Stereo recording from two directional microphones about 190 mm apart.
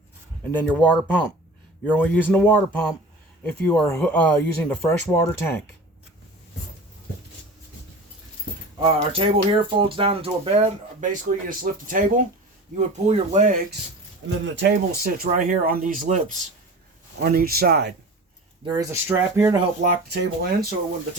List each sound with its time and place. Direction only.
0.4 s speech: 10° left (ahead or behind)
3.7 s speech: 10° left (ahead or behind)
8.8 s speech: 30° right (ahead or behind)
14.3 s speech: 70° right (ahead or behind)
15.3 s speech: 45° right (ahead or behind)
18.6 s speech: 15° right (ahead or behind)
20.1 s speech: 55° right (ahead or behind)